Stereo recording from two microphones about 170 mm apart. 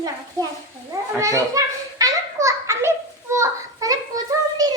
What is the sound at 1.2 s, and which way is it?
Children playing, 20° right (ahead or behind).